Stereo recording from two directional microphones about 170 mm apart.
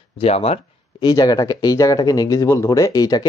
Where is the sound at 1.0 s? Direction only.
25° left (ahead or behind).